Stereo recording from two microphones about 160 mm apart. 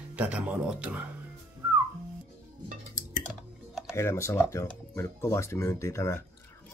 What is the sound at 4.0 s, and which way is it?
Speech, 15° left (ahead or behind).